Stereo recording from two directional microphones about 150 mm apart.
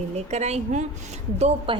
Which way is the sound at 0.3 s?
50° right (ahead or behind).